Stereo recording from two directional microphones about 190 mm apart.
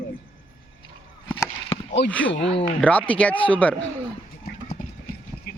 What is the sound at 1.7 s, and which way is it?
Chop, 25° left (ahead or behind).